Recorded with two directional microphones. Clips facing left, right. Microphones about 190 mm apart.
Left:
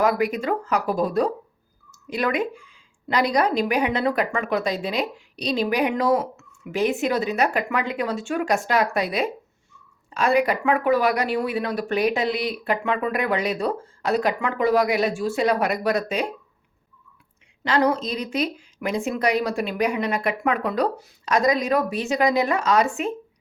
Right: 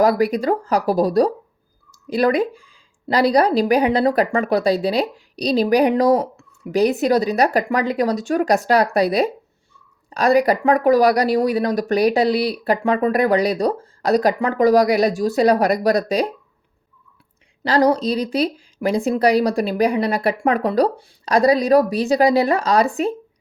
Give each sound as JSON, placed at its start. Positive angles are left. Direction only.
{"t": 0.0, "sound": "speech", "side_deg": -35}
{"t": 17.6, "sound": "speech", "side_deg": -35}